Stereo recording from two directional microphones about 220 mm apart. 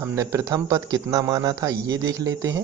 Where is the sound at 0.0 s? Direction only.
10° right (ahead or behind).